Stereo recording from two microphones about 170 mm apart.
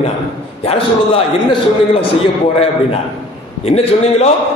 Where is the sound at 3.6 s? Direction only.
35° left (ahead or behind).